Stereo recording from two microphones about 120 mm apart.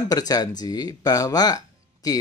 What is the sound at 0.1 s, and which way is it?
Speech, 30° left (ahead or behind).